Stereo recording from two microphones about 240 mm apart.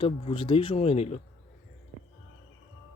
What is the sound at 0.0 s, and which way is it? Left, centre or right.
Speech, left.